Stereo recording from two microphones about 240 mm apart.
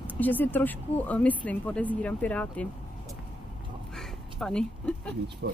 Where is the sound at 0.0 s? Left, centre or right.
Centre.